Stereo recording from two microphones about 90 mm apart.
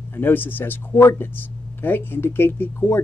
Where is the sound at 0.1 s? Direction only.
25° left (ahead or behind).